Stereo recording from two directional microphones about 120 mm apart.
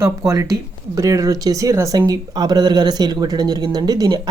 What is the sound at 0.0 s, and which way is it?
Speech, 25° right (ahead or behind).